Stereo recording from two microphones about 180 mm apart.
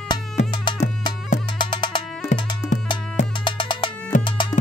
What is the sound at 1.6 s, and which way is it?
Music, 25° left (ahead or behind).